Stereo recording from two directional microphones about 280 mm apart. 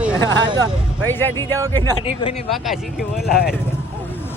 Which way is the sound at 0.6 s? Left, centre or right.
Centre.